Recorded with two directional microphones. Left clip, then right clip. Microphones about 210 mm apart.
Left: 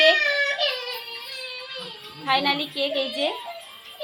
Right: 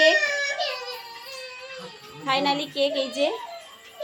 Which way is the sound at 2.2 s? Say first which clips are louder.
Left 1 dB; 20° right (ahead or behind).